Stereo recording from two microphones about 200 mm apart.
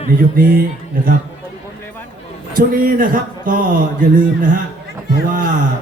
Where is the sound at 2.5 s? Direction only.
45° right (ahead or behind).